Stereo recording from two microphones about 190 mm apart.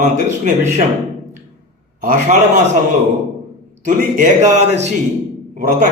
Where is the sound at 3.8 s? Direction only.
40° right (ahead or behind).